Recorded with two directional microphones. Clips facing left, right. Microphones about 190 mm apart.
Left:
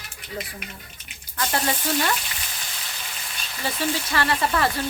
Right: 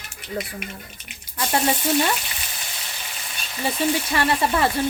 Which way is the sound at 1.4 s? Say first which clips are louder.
Right 3 dB; 20° right (ahead or behind).